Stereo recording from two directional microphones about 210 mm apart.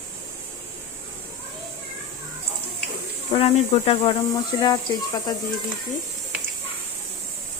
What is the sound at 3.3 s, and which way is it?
Speech, 25° left (ahead or behind).